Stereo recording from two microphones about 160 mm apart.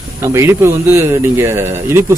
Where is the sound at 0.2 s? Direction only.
15° right (ahead or behind).